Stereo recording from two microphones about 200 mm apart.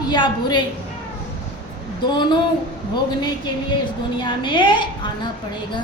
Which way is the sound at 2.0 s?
20° left (ahead or behind).